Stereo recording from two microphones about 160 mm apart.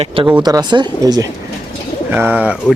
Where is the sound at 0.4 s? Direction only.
25° right (ahead or behind).